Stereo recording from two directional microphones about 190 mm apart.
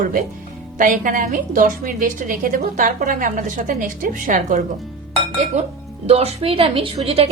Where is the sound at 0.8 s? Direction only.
45° right (ahead or behind).